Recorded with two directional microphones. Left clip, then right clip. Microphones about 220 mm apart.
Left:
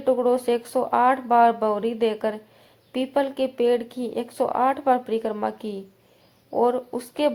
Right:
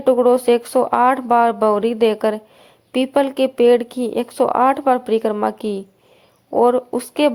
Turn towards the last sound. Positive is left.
turn(degrees=-30)  # may be behind; listen again after turning